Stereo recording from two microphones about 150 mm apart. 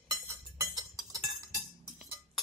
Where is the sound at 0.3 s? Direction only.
20° right (ahead or behind).